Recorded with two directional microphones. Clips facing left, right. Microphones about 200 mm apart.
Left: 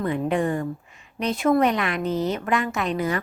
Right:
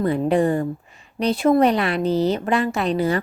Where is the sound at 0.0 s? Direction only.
35° right (ahead or behind).